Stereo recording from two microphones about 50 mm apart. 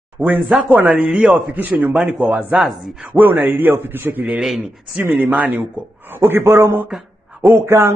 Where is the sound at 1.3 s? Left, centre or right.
Right.